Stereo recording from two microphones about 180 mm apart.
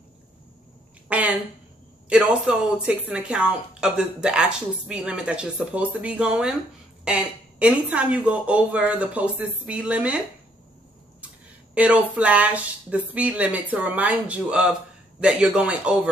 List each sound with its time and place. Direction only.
1.0 s a sound: 5° right (ahead or behind)
2.0 s speech: 5° right (ahead or behind)
11.7 s speech: 5° right (ahead or behind)